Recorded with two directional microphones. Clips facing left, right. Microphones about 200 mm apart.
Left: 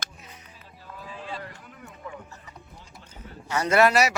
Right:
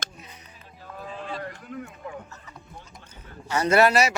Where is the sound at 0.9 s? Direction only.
50° right (ahead or behind).